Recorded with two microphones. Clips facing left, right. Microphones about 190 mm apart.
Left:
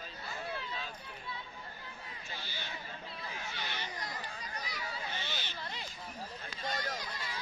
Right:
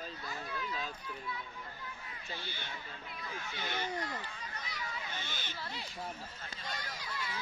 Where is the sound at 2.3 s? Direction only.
55° right (ahead or behind).